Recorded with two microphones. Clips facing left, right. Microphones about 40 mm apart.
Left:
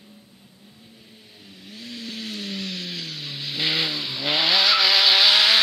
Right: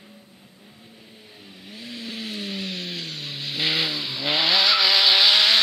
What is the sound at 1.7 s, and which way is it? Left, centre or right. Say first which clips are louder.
Vehicle: even; centre.